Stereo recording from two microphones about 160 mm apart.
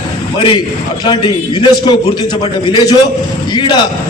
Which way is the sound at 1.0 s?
30° left (ahead or behind).